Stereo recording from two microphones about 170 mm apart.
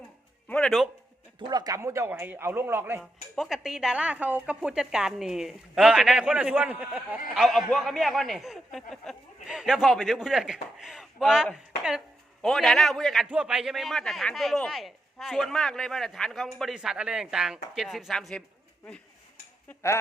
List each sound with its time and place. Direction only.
0.4 s music: 5° left (ahead or behind)
1.4 s a man's voice: 25° right (ahead or behind)
3.0 s a man's voice: centre (ahead or behind)
19.6 s cutlery: 15° left (ahead or behind)